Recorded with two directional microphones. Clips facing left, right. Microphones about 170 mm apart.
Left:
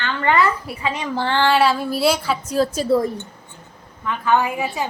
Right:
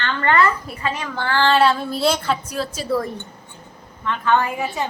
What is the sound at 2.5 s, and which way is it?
Speech, 40° left (ahead or behind).